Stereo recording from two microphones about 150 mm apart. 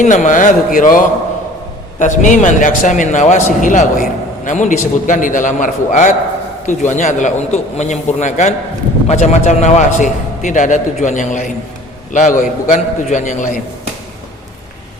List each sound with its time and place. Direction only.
0.0 s a man's voice: 55° left (ahead or behind)